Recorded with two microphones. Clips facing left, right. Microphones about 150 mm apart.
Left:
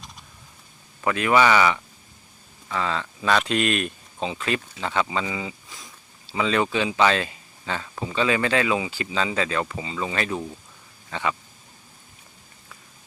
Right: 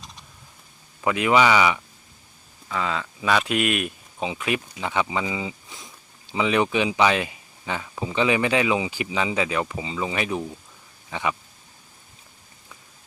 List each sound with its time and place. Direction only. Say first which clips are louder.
1.0 s speech: even; 15° right (ahead or behind)